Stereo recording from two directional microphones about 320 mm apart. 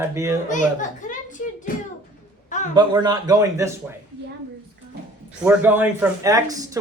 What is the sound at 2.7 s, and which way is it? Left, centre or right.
Speech, centre.